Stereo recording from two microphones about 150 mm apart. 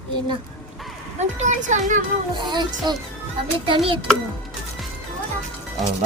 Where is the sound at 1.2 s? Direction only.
50° right (ahead or behind).